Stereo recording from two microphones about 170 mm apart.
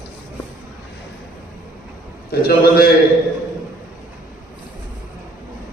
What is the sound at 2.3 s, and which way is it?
Speech, 65° left (ahead or behind).